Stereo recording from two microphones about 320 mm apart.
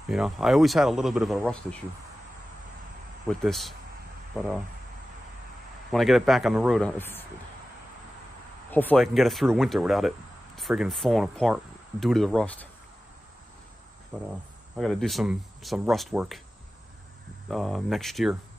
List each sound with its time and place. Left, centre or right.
0.1 s speech: centre
3.3 s speech: centre
5.9 s speech: centre
8.6 s speech: centre
14.1 s speech: centre
17.5 s speech: centre